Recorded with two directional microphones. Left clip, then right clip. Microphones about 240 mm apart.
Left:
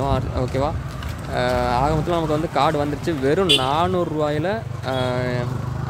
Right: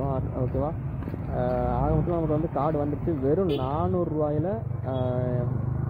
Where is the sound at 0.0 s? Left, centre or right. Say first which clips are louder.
Left 7 dB; left.